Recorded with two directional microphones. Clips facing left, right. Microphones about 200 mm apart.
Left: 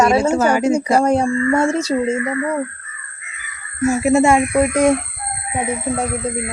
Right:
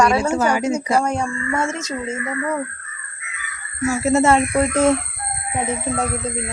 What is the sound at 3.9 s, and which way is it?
Speech, 15° left (ahead or behind).